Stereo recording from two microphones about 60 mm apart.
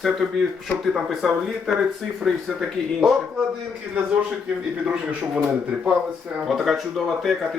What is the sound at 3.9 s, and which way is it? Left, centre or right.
Speech, right.